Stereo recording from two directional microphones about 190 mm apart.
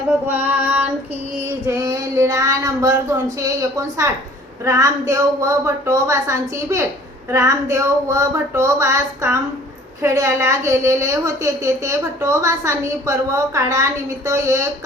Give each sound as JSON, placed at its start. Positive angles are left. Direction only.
{"t": 0.3, "sound": "female singing", "side_deg": -10}
{"t": 4.6, "sound": "a woman's voice", "side_deg": -15}